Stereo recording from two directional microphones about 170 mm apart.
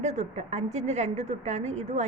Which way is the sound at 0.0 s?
40° right (ahead or behind).